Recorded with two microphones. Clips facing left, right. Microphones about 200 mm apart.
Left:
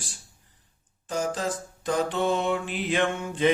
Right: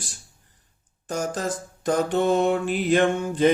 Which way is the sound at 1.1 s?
45° right (ahead or behind).